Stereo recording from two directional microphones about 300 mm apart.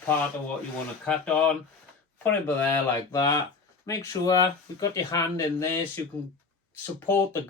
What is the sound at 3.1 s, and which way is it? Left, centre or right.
Speech, centre.